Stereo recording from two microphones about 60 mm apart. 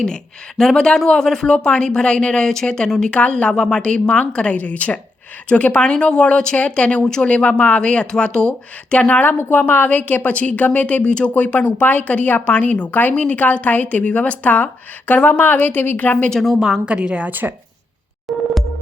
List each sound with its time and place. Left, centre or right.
0.6 s a woman's voice: centre; by 16.3 s left
16.3 s a woman's voice: centre
16.9 s a woman's voice: centre
18.3 s a sound: centre